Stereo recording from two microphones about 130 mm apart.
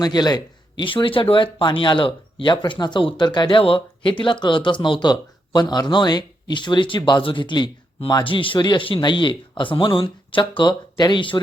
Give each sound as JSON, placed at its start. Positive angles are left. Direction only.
{"t": 0.0, "sound": "speech", "side_deg": 30}